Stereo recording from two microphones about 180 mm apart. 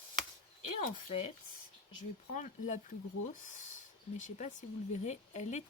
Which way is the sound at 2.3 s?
45° left (ahead or behind).